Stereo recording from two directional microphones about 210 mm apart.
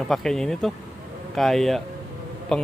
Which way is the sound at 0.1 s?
Centre (ahead or behind).